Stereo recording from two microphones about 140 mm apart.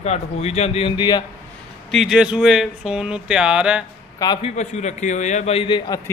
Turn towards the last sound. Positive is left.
turn(degrees=30)  # may be behind; listen again after turning